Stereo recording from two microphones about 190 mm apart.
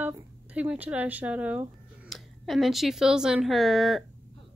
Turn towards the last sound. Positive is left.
turn(degrees=0)  # may be behind; listen again after turning